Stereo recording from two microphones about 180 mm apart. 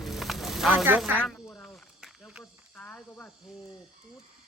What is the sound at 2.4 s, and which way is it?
Speech, 5° left (ahead or behind).